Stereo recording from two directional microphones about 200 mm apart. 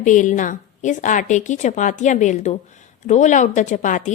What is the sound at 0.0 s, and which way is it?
Speech, 40° left (ahead or behind).